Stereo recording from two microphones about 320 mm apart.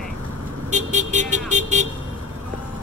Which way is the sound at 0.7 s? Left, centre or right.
Right.